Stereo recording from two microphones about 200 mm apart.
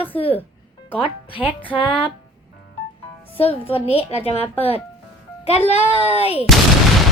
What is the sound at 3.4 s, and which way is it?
Speech, 30° left (ahead or behind).